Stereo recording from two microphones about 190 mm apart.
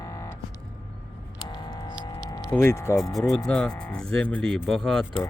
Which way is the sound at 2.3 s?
15° left (ahead or behind).